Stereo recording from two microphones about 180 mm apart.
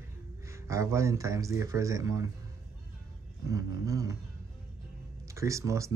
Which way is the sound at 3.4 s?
20° right (ahead or behind).